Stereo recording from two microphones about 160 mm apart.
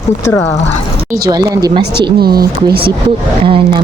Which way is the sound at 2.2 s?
75° right (ahead or behind).